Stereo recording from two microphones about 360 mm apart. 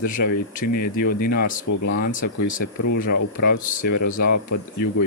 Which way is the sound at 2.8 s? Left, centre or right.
Left.